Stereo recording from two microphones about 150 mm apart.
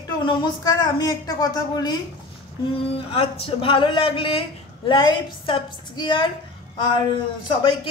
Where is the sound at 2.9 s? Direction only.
40° left (ahead or behind).